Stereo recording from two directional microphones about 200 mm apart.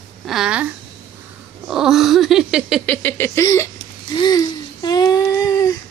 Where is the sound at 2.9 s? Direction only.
10° left (ahead or behind).